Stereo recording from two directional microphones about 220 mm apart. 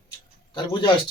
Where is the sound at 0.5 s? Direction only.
20° left (ahead or behind).